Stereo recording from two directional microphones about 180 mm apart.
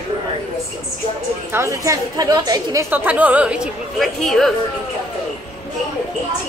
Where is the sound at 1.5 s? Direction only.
15° right (ahead or behind).